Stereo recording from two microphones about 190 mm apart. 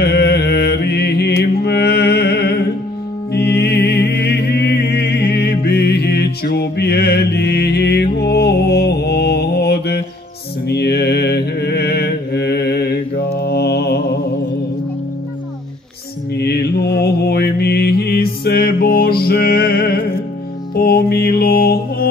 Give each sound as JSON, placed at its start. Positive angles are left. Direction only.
{"t": 0.0, "sound": "music", "side_deg": 55}
{"t": 10.7, "sound": "mantra", "side_deg": 60}
{"t": 16.3, "sound": "mantra", "side_deg": 60}
{"t": 20.7, "sound": "music", "side_deg": 55}